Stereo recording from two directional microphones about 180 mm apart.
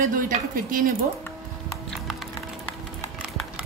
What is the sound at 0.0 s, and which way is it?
Speech, 50° right (ahead or behind).